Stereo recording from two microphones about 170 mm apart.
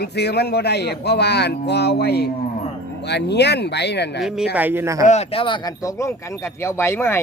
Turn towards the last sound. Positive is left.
turn(degrees=15)  # may be behind; listen again after turning